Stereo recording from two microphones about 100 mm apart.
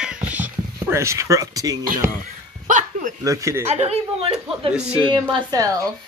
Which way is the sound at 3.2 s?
30° right (ahead or behind).